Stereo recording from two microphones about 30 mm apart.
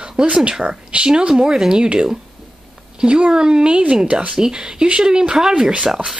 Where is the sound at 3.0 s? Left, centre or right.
Right.